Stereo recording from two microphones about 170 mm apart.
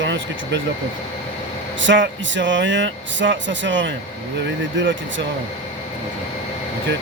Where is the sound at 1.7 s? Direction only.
90° right.